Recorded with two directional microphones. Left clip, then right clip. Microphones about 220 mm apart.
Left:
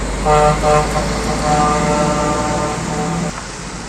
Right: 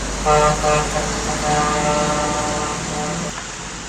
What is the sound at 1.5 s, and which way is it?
Vehicle, 45° left (ahead or behind).